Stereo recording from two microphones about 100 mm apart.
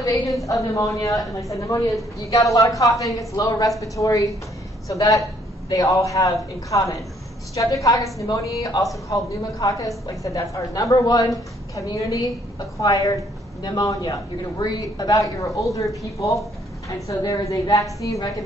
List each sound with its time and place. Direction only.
0.5 s a woman's voice: 35° left (ahead or behind)
5.7 s a woman's voice: 35° left (ahead or behind)